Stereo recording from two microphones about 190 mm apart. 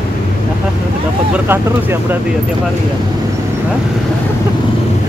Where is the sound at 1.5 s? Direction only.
10° right (ahead or behind).